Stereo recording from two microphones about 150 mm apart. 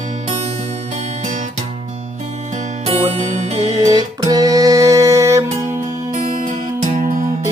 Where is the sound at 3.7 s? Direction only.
25° right (ahead or behind).